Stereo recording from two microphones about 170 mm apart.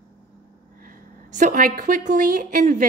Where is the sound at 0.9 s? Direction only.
50° right (ahead or behind).